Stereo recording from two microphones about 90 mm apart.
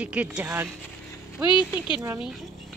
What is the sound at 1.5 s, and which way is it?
Speech, 65° left (ahead or behind).